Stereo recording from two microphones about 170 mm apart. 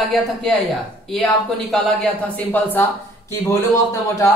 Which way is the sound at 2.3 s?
10° left (ahead or behind).